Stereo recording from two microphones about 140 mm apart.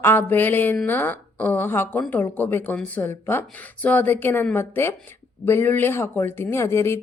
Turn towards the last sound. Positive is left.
turn(degrees=20)  # may be behind; listen again after turning